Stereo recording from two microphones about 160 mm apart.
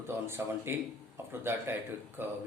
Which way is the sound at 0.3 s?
15° right (ahead or behind).